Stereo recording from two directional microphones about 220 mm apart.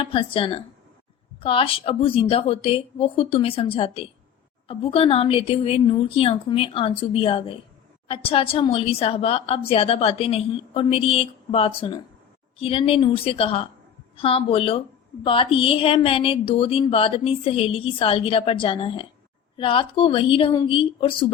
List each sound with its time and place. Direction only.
0.0 s a woman's voice: 25° left (ahead or behind)